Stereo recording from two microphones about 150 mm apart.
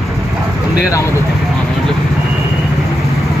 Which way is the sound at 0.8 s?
20° left (ahead or behind).